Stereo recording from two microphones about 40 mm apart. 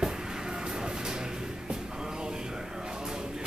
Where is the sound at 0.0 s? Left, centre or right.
Centre.